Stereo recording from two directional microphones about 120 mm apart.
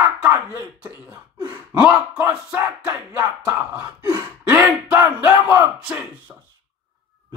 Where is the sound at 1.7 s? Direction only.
10° right (ahead or behind).